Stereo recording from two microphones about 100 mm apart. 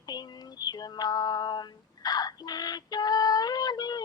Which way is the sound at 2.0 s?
40° left (ahead or behind).